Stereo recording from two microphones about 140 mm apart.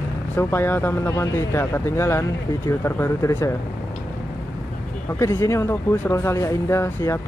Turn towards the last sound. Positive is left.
turn(degrees=20)  # may be behind; listen again after turning